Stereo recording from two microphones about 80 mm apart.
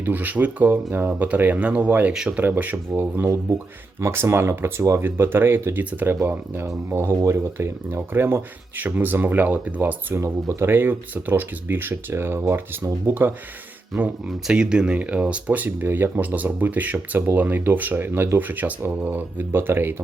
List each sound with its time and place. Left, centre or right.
0.0 s speech: right
2.4 s speech: right
14.3 s speech: centre; by 20.0 s right